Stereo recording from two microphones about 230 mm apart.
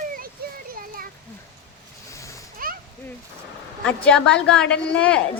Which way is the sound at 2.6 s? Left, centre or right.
Right.